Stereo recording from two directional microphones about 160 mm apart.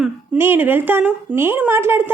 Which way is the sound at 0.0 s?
10° right (ahead or behind).